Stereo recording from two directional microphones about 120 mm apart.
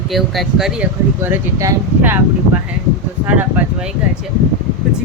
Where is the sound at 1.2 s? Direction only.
25° right (ahead or behind).